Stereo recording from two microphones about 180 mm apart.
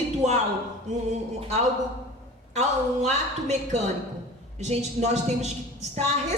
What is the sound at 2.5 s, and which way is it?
A woman's voice, 40° right (ahead or behind).